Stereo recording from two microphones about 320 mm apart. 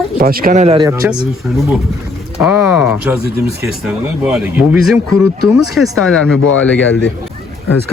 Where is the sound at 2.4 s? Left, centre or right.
Centre.